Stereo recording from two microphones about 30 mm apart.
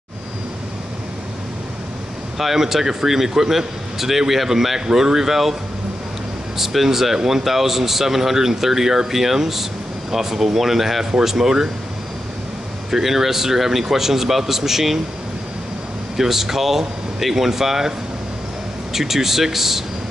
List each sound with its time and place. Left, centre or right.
2.3 s speech: centre
6.6 s speech: centre
7.2 s speech: centre
11.1 s speech: centre
12.9 s speech: centre
16.2 s speech: centre
18.9 s speech: centre